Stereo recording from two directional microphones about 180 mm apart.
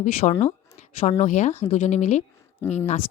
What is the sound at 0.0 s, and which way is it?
A woman's voice, 40° left (ahead or behind).